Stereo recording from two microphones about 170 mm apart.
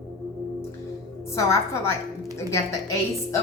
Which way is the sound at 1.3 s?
15° left (ahead or behind).